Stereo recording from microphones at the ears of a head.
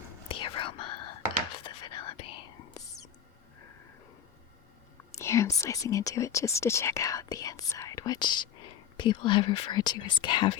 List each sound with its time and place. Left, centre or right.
0.1 s whispering: left
4.9 s speech: left